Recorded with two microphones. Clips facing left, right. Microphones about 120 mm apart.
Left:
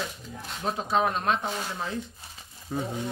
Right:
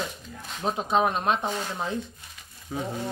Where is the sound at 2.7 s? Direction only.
5° right (ahead or behind).